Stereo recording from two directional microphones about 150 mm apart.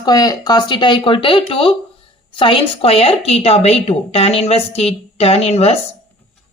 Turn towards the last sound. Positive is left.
turn(degrees=45)  # may be behind; listen again after turning